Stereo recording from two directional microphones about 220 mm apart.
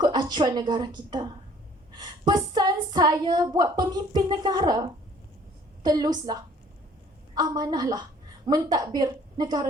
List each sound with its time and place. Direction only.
0.0 s a woman's voice: 20° right (ahead or behind)